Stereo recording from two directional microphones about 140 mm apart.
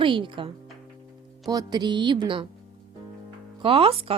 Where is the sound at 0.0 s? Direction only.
35° right (ahead or behind).